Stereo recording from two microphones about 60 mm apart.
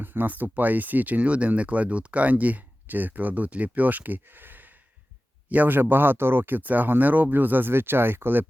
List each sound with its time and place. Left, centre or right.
0.0 s speech: right